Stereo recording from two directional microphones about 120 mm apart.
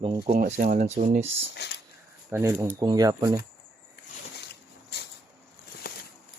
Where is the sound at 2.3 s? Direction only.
25° right (ahead or behind).